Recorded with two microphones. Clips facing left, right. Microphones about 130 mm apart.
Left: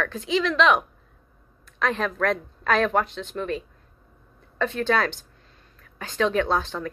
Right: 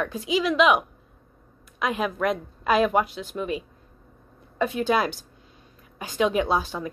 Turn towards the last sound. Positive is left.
turn(degrees=-10)  # may be behind; listen again after turning